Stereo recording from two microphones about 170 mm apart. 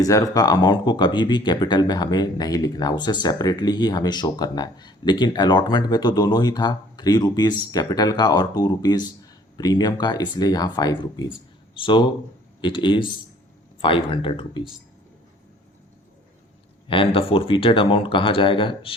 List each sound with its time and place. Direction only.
0.0 s speech: 20° left (ahead or behind)
16.9 s speech: 30° left (ahead or behind)